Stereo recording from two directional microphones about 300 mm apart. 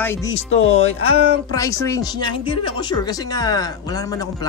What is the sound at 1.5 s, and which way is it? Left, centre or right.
Speech, centre.